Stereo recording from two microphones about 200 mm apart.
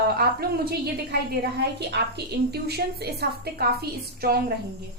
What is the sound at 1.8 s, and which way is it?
A woman's voice, 55° right (ahead or behind).